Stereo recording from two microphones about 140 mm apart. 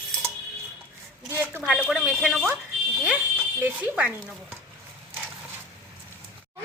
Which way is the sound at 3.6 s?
10° right (ahead or behind).